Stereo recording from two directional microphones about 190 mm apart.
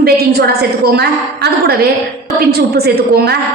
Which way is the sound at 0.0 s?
55° right (ahead or behind).